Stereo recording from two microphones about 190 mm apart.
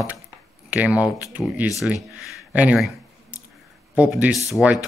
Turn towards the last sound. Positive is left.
turn(degrees=-5)  # may be behind; listen again after turning